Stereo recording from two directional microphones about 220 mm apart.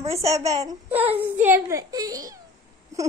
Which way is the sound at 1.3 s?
10° right (ahead or behind).